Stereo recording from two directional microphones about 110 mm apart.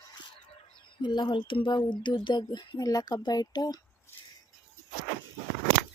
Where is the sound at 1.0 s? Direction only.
45° left (ahead or behind).